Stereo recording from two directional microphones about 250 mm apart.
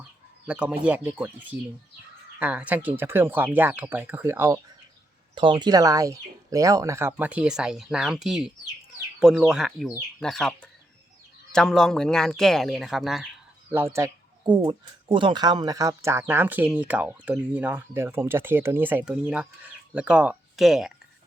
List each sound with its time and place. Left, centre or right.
0.4 s speech: centre